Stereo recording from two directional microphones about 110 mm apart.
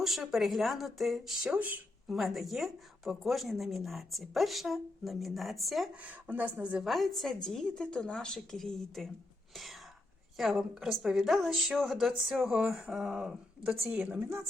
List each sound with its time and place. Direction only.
0.0 s speech: centre (ahead or behind)
1.5 s a woman's voice: 15° right (ahead or behind)
2.0 s speech: centre (ahead or behind)
6.1 s a woman's voice: 15° right (ahead or behind)
6.8 s speech: centre (ahead or behind)
10.3 s a woman's voice: centre (ahead or behind)
14.2 s speech: 25° right (ahead or behind)